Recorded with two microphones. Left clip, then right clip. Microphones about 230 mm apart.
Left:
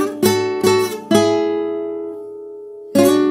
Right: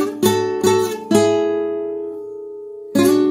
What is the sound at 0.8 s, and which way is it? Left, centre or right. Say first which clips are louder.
Guitar: even; centre.